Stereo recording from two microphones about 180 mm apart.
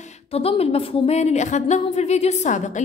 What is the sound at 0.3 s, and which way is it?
A woman's voice, 35° left (ahead or behind).